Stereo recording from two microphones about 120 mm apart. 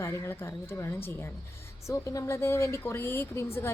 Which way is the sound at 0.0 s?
20° left (ahead or behind).